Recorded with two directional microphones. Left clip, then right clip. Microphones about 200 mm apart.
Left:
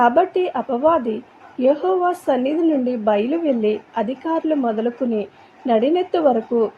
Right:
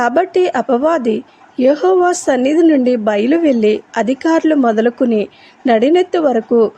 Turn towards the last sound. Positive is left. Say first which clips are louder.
# right 5 dB
turn(degrees=-30)  # may be behind; listen again after turning